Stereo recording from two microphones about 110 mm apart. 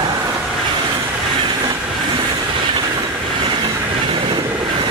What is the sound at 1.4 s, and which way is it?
Train, 45° right (ahead or behind).